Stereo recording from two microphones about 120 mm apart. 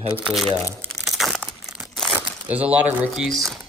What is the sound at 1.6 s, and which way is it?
Crumpling, 5° right (ahead or behind).